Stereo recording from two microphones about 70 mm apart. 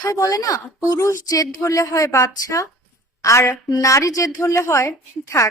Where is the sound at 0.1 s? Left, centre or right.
Left.